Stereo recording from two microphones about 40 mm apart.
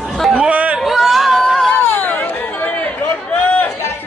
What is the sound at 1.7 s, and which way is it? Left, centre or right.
Chatter, left.